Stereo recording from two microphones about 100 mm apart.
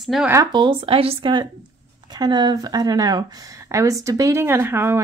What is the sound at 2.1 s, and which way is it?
Speech, 45° right (ahead or behind).